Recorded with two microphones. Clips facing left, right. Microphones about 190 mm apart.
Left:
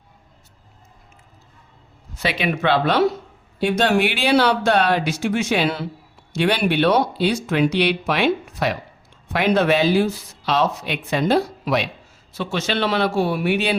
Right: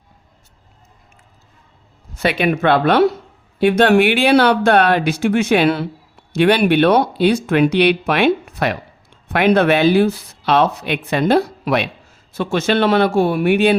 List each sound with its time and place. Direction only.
2.2 s speech: 50° right (ahead or behind)